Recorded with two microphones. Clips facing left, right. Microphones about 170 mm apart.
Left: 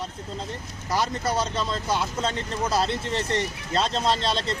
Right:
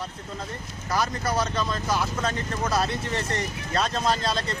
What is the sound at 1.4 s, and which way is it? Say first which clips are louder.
Speech: even; 25° left (ahead or behind).